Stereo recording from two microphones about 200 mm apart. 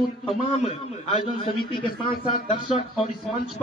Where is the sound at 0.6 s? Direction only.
30° left (ahead or behind).